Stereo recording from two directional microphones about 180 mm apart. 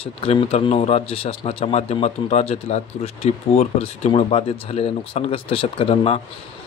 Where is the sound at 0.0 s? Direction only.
35° left (ahead or behind).